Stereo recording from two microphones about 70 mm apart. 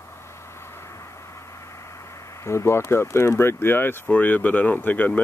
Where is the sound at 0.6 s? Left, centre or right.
Left.